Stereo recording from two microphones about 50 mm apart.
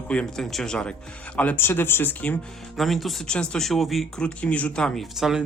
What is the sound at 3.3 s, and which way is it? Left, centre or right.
Speech, centre.